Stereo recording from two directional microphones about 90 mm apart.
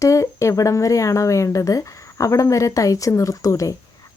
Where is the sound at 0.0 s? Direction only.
35° left (ahead or behind).